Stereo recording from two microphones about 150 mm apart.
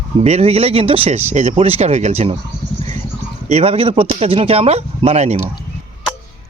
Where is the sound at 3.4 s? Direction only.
45° right (ahead or behind).